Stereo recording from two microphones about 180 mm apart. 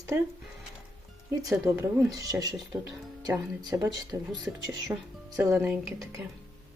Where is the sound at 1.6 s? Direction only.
15° right (ahead or behind).